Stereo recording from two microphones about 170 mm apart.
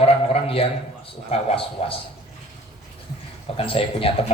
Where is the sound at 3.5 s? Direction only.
35° left (ahead or behind).